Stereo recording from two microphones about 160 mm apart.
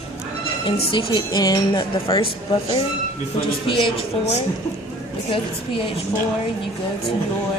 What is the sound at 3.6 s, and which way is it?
Speech, 30° left (ahead or behind).